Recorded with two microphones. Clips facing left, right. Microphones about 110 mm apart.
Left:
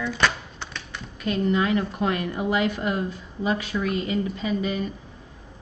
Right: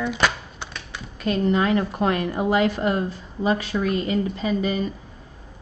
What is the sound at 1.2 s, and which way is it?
A woman's voice, 40° right (ahead or behind).